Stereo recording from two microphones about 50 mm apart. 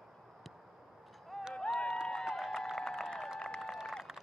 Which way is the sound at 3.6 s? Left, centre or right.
Centre.